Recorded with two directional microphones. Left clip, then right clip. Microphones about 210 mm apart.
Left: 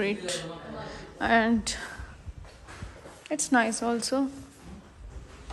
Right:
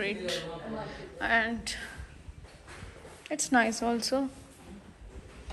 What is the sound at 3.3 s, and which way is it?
Speech, 10° left (ahead or behind).